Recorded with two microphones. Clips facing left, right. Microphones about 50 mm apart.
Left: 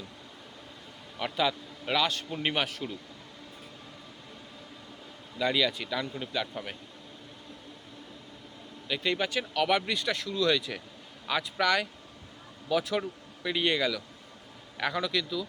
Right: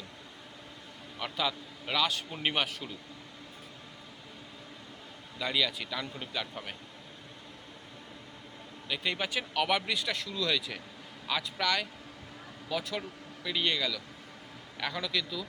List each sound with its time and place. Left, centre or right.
1.2 s a man's voice: centre
5.4 s a man's voice: centre
8.9 s a man's voice: centre
11.3 s a man's voice: centre
13.0 s a sound: left
13.7 s speech: left
15.1 s a man's voice: centre